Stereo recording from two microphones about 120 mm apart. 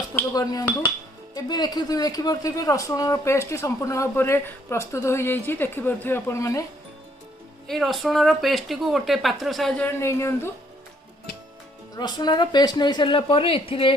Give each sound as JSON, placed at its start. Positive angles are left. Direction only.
{"t": 0.3, "sound": "speech", "side_deg": 30}
{"t": 7.6, "sound": "speech", "side_deg": 0}
{"t": 9.8, "sound": "speech", "side_deg": 20}
{"t": 12.0, "sound": "speech", "side_deg": 35}